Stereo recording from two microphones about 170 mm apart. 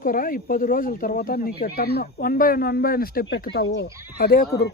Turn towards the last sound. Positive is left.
turn(degrees=70)  # may be behind; listen again after turning